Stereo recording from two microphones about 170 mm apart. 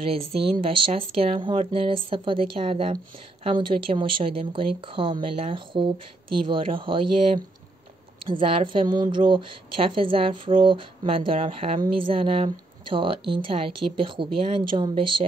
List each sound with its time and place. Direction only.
0.1 s a woman's voice: 35° right (ahead or behind)